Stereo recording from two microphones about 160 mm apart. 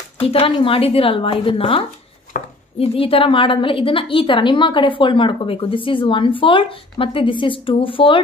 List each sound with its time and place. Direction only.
0.2 s a woman's voice: 35° left (ahead or behind)
2.3 s chopping: 55° left (ahead or behind)
2.8 s a woman's voice: 35° left (ahead or behind)